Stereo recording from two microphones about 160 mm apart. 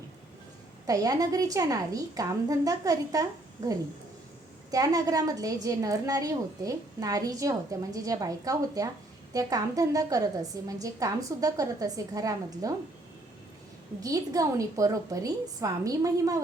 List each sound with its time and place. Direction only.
0.9 s a woman's voice: 20° right (ahead or behind)
14.0 s a woman's voice: 20° right (ahead or behind)